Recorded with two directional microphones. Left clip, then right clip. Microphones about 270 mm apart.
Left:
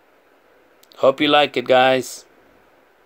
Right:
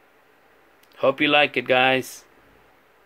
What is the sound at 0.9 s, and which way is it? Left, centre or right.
Speech, left.